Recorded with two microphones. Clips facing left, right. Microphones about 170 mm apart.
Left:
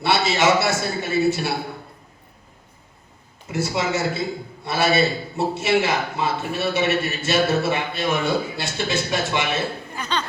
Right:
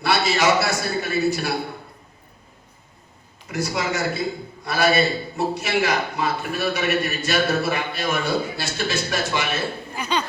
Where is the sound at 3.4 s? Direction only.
25° left (ahead or behind).